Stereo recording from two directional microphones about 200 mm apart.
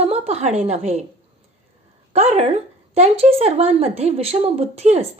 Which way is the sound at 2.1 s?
30° right (ahead or behind).